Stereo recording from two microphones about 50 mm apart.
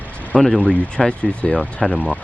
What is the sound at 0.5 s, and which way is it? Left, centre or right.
Speech, left.